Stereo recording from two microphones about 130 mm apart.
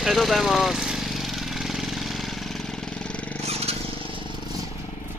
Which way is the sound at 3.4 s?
50° right (ahead or behind).